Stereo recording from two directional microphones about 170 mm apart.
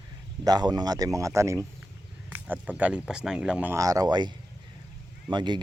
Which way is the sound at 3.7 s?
20° right (ahead or behind).